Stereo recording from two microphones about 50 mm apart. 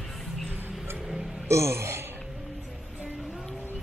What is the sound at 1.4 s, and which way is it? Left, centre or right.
Speech, right.